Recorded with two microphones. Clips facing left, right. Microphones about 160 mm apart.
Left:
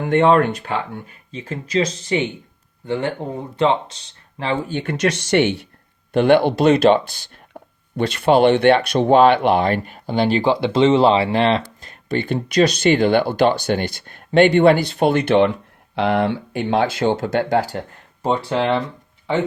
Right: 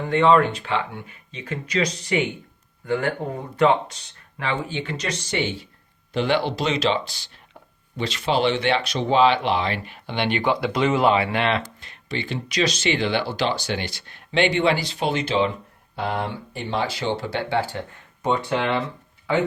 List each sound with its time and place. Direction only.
0.0 s speech: 50° left (ahead or behind); by 3.9 s 25° left (ahead or behind)
4.6 s speech: 50° left (ahead or behind); by 5.6 s 70° left (ahead or behind)
6.1 s speech: 55° left (ahead or behind)
7.6 s a sound: 55° left (ahead or behind)
7.9 s speech: 55° left (ahead or behind); by 11.6 s 35° left (ahead or behind)
11.8 s speech: 50° left (ahead or behind); by 15.5 s 65° left (ahead or behind)
16.0 s speech: 85° left; by 18.8 s 30° left (ahead or behind)